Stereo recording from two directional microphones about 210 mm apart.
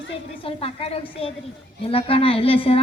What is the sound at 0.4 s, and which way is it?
A woman's voice, 25° left (ahead or behind).